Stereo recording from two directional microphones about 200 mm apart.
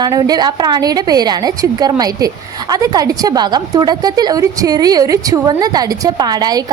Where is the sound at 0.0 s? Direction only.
20° right (ahead or behind).